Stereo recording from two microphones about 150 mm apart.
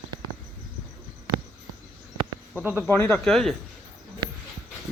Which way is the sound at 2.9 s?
15° left (ahead or behind).